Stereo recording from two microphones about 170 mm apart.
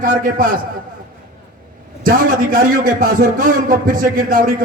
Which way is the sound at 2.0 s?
55° right (ahead or behind).